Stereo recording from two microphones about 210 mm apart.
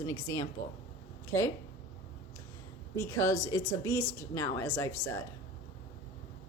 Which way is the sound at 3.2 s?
15° left (ahead or behind).